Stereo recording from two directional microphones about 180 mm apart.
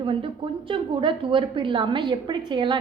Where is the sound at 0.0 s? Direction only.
30° right (ahead or behind).